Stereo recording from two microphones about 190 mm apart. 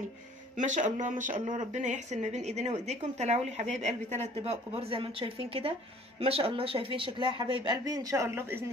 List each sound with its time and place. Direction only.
0.6 s speech: 40° right (ahead or behind); by 8.6 s 10° right (ahead or behind)